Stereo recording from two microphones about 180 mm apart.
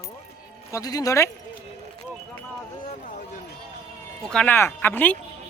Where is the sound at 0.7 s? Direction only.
20° left (ahead or behind).